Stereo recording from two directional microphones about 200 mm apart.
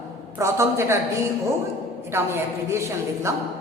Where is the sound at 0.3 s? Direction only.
15° right (ahead or behind).